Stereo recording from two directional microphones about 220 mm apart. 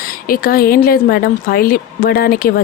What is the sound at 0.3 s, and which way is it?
Speech, 40° left (ahead or behind).